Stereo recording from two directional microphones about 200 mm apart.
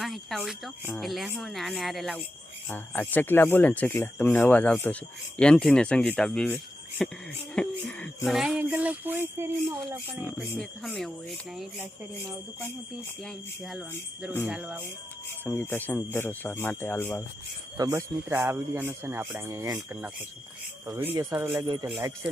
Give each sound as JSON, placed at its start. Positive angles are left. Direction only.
{"t": 0.0, "sound": "music", "side_deg": 0}
{"t": 2.6, "sound": "speech", "side_deg": 10}
{"t": 5.4, "sound": "music", "side_deg": 5}
{"t": 10.6, "sound": "music", "side_deg": 0}
{"t": 12.3, "sound": "speech", "side_deg": -10}
{"t": 13.2, "sound": "music", "side_deg": 0}
{"t": 15.4, "sound": "speech", "side_deg": 10}
{"t": 17.7, "sound": "speech", "side_deg": -15}